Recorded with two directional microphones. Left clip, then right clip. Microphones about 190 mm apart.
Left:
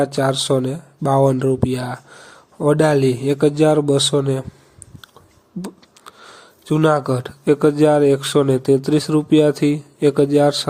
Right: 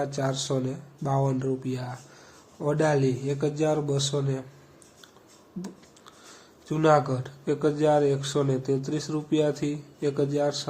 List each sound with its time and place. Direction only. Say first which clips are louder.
0.0 s speech: left 11 dB; 45° left (ahead or behind)
6.7 s speech: left 5 dB; 45° left (ahead or behind)